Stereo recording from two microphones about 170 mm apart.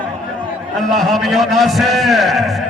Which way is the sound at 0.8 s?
Centre (ahead or behind).